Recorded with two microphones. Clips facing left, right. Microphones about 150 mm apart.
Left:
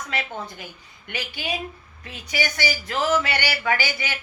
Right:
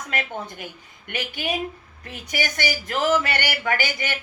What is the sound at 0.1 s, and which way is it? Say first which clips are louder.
Speech: right 2 dB; 50° right (ahead or behind).